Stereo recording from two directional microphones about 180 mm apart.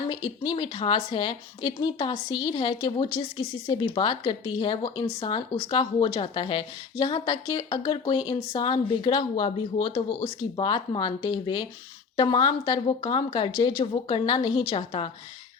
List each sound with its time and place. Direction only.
0.1 s a woman's voice: 25° left (ahead or behind)